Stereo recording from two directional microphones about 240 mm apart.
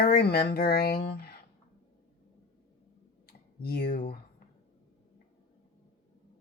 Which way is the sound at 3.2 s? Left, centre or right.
Left.